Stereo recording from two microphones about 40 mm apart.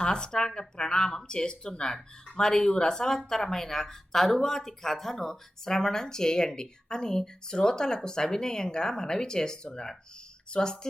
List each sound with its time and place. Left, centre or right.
0.0 s speech: left